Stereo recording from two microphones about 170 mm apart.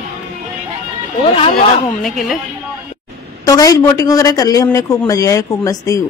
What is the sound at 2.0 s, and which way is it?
Speech, centre (ahead or behind).